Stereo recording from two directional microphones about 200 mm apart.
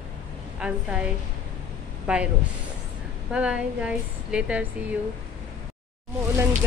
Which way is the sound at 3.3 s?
5° right (ahead or behind).